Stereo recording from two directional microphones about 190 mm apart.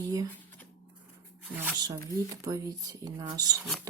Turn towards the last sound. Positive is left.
turn(degrees=-20)  # may be behind; listen again after turning